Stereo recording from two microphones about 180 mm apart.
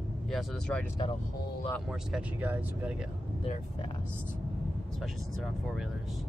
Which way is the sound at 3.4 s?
30° left (ahead or behind).